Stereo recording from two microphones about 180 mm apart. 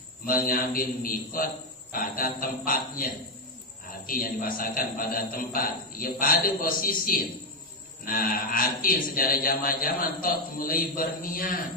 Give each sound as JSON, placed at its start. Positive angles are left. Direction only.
{"t": 0.3, "sound": "a man's voice", "side_deg": 50}